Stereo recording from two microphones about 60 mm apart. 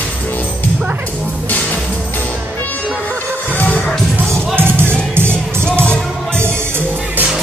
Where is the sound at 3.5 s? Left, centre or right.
Left.